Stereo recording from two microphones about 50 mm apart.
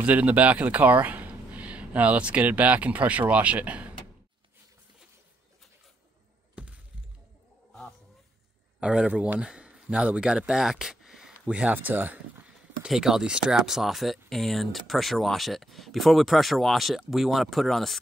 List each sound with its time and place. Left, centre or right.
0.0 s speech: right
6.6 s a sound: right
8.8 s speech: right
11.4 s speech: right
11.7 s speech: right
12.8 s speech: centre